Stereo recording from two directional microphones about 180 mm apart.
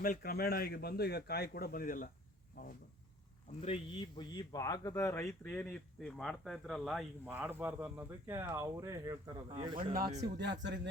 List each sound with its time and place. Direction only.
0.0 s speech: 55° left (ahead or behind)
3.6 s speech: 35° left (ahead or behind); by 9.8 s 25° right (ahead or behind)
9.9 s speech: 50° right (ahead or behind)
10.3 s speech: 70° right (ahead or behind)